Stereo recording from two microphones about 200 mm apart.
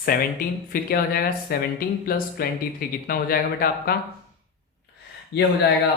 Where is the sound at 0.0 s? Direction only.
50° left (ahead or behind).